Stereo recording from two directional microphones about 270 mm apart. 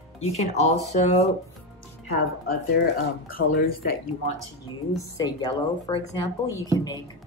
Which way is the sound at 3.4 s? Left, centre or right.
Left.